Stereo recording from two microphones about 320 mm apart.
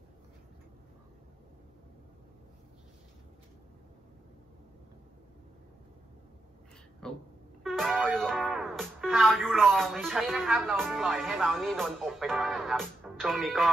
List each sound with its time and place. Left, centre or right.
7.0 s speech: centre